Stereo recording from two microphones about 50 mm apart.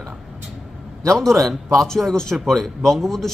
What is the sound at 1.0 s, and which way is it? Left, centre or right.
A man's voice, centre.